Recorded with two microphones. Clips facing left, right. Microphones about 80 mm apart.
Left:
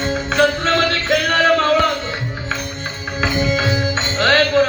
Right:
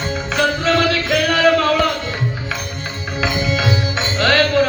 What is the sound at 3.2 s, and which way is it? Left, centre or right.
Music, left.